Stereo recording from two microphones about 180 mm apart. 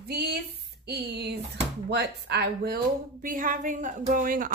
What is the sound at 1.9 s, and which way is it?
A woman's voice, 70° right (ahead or behind).